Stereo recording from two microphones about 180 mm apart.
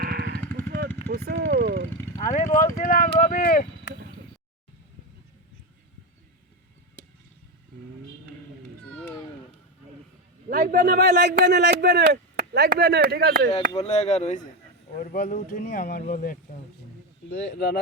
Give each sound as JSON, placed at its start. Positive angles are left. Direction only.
{"t": 0.0, "sound": "vehicle", "side_deg": -60}
{"t": 1.1, "sound": "speech", "side_deg": -60}
{"t": 2.2, "sound": "speech", "side_deg": 45}
{"t": 10.5, "sound": "a man's voice", "side_deg": -55}
{"t": 13.5, "sound": "speech", "side_deg": 35}
{"t": 17.2, "sound": "speech", "side_deg": 75}